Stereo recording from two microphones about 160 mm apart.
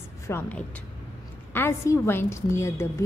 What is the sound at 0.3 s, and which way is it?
A woman's voice, 10° left (ahead or behind).